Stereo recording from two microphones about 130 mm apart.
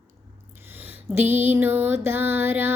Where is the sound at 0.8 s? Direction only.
15° right (ahead or behind).